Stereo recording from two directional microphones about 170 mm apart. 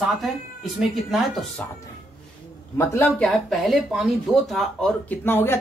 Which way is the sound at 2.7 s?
15° left (ahead or behind).